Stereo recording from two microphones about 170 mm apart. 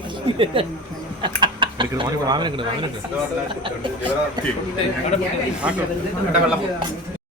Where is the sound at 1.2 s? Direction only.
30° right (ahead or behind).